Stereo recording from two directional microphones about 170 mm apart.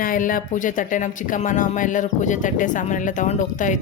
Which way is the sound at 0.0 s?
55° left (ahead or behind).